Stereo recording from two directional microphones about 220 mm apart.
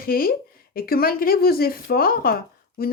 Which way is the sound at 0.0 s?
40° left (ahead or behind).